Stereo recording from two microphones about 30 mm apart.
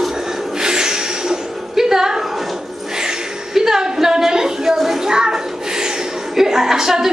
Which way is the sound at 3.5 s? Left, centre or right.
Centre.